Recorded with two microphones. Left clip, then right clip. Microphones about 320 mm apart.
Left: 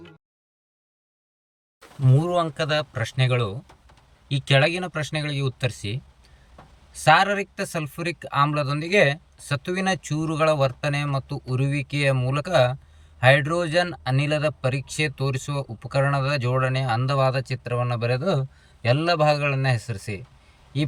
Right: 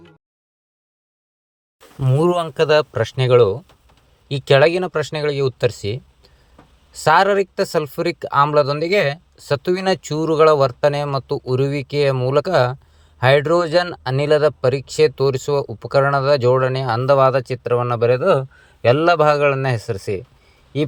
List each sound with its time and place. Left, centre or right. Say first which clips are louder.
2.0 s speech: right 5 dB; centre
7.0 s speech: right 4 dB; centre